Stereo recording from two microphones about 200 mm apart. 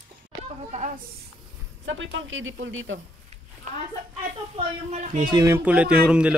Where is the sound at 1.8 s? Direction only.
70° right (ahead or behind).